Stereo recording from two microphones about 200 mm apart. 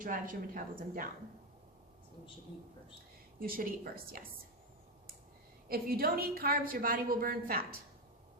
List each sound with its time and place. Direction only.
0.0 s a woman's voice: 45° right (ahead or behind)
3.4 s a woman's voice: 45° right (ahead or behind)
5.6 s a woman's voice: 50° right (ahead or behind)